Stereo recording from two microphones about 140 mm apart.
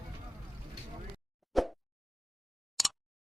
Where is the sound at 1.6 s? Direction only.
Centre (ahead or behind).